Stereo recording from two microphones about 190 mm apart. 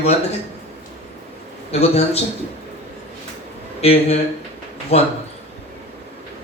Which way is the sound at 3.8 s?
35° left (ahead or behind).